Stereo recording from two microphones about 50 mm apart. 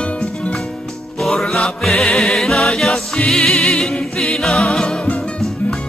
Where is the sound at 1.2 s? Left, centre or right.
Centre.